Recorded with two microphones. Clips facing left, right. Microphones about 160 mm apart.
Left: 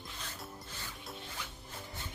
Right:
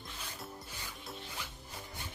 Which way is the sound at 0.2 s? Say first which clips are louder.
Right 1 dB; 10° right (ahead or behind).